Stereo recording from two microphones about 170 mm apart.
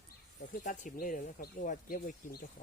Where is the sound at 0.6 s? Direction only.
50° left (ahead or behind).